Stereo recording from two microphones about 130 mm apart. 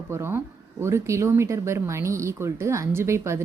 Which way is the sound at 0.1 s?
20° right (ahead or behind).